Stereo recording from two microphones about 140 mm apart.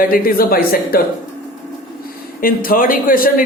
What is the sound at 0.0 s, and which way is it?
A man's voice, 90° left.